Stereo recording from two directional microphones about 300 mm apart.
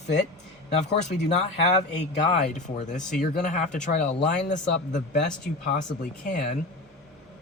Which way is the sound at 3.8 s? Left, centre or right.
Left.